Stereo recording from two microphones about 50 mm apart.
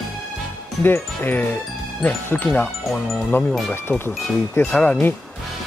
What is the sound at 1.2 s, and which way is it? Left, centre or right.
Speech, left.